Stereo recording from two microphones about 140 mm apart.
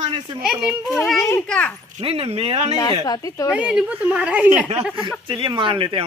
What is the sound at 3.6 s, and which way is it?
Speech, 5° right (ahead or behind).